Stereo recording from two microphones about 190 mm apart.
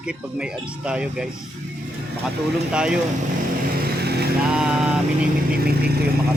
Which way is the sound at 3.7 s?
55° right (ahead or behind).